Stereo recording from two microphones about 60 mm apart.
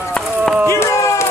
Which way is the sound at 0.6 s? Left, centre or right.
Left.